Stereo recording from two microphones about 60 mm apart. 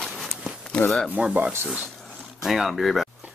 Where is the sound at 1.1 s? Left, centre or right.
Centre.